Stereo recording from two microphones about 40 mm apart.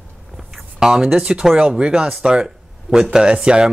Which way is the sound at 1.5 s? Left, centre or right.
Right.